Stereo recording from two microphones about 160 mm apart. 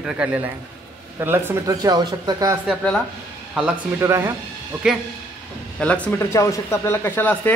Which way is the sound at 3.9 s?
15° right (ahead or behind).